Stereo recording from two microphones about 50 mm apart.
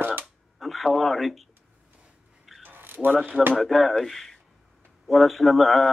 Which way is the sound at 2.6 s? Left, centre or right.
Right.